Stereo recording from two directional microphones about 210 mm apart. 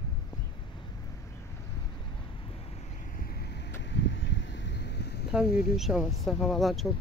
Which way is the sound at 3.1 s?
45° left (ahead or behind).